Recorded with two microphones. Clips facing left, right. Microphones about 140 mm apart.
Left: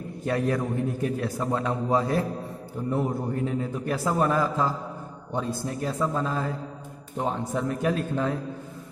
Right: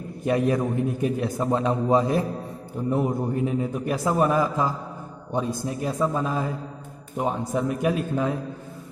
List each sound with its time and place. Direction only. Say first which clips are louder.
0.2 s a man's voice: right 4 dB; 15° right (ahead or behind)